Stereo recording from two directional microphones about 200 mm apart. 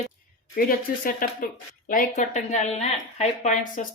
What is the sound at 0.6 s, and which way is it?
Speech, 45° left (ahead or behind).